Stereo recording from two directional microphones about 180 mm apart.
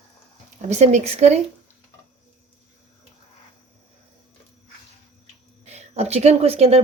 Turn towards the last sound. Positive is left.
turn(degrees=-35)  # may be behind; listen again after turning